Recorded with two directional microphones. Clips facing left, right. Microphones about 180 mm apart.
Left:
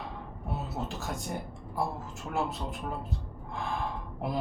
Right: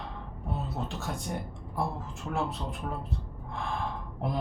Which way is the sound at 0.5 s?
5° left (ahead or behind).